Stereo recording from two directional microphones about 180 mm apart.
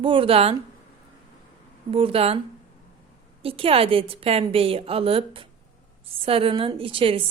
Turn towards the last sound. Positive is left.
turn(degrees=-30)  # may be behind; listen again after turning